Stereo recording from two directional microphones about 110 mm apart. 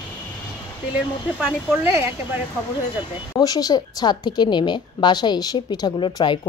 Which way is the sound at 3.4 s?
35° left (ahead or behind).